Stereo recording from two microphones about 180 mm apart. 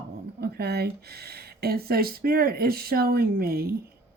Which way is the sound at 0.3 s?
60° right (ahead or behind).